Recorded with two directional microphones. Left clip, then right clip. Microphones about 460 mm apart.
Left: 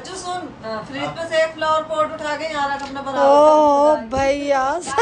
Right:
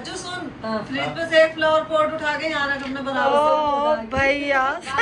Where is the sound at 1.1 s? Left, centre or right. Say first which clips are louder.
Right 3 dB; centre.